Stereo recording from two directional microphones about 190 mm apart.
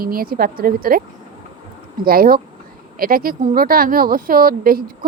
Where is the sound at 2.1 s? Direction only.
50° right (ahead or behind).